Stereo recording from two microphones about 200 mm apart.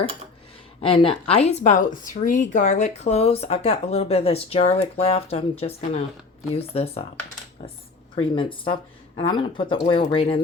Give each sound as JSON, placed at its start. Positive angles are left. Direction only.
{"t": 0.8, "sound": "speech", "side_deg": 30}